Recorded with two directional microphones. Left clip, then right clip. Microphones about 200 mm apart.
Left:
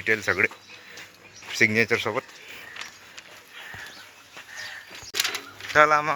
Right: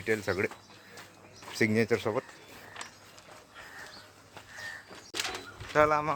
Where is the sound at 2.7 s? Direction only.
20° right (ahead or behind).